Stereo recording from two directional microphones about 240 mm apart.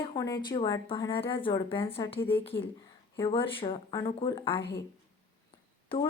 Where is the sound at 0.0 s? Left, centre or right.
Centre.